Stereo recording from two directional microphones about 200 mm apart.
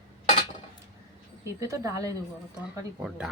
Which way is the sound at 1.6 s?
15° right (ahead or behind).